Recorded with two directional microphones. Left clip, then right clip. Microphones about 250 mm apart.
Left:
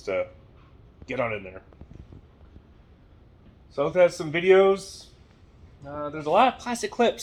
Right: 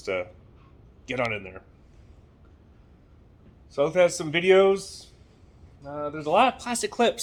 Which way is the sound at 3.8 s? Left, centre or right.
Centre.